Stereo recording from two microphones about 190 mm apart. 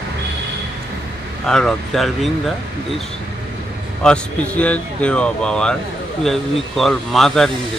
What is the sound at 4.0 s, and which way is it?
Speech, 5° left (ahead or behind).